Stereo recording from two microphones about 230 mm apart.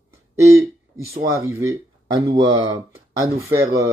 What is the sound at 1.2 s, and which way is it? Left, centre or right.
Speech, centre.